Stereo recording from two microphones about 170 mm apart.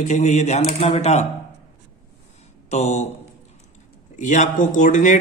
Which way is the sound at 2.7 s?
40° left (ahead or behind).